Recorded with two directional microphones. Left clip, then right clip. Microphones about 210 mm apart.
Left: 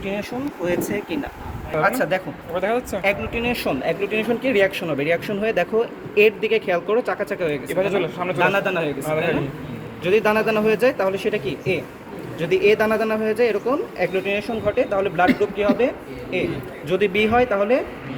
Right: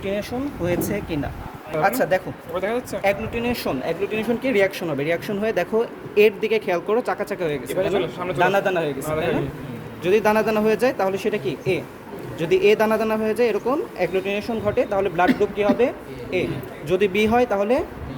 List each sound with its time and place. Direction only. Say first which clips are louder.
0.0 s speech: right 1 dB; 55° right (ahead or behind)
2.0 s speech: right 1 dB; 40° right (ahead or behind)
2.6 s speech: left 3 dB; 5° left (ahead or behind)
3.0 s speech: even; 40° right (ahead or behind)
7.8 s speech: left 1 dB; centre (ahead or behind)
8.4 s speech: right 1 dB; 35° right (ahead or behind)
10.0 s speech: even; 40° right (ahead or behind)